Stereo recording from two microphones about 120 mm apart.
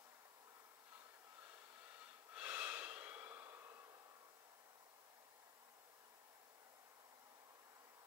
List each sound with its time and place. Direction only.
2.3 s snort: 15° right (ahead or behind)